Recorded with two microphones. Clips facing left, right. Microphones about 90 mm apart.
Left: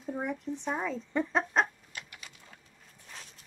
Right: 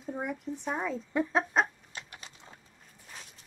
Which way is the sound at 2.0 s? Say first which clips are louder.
Right 1 dB; 30° right (ahead or behind).